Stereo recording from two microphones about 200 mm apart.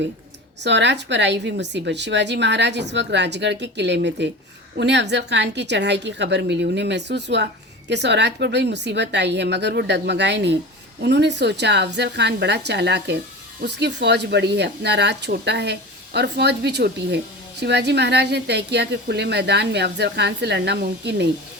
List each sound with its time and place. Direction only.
0.6 s a woman's voice: 60° right (ahead or behind)